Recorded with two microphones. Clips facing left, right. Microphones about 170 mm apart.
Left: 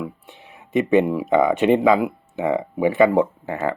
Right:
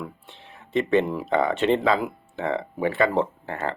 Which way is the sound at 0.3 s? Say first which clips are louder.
Left 3 dB; 15° left (ahead or behind).